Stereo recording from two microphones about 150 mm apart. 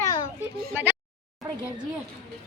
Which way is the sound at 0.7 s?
15° right (ahead or behind).